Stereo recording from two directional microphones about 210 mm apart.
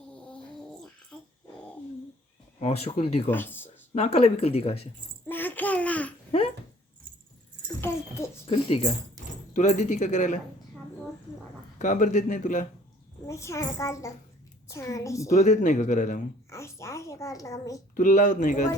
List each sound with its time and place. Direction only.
0.1 s a sound: 5° left (ahead or behind)
2.6 s speech: 30° left (ahead or behind)
3.2 s speech: 10° left (ahead or behind)
3.9 s speech: 30° left (ahead or behind)
5.3 s a sound: 10° left (ahead or behind)
8.4 s speech: 30° left (ahead or behind)
11.8 s speech: 35° left (ahead or behind)
13.2 s a child's voice: 15° left (ahead or behind)
15.3 s speech: 35° left (ahead or behind)
16.5 s a sound: 15° left (ahead or behind)
17.9 s speech: 35° left (ahead or behind)